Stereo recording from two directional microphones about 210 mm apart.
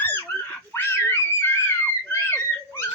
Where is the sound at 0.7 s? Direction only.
10° left (ahead or behind).